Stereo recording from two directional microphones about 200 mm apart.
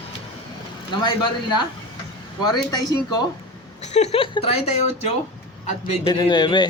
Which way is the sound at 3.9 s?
30° left (ahead or behind).